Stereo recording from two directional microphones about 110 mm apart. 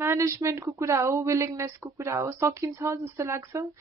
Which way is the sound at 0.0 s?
25° right (ahead or behind).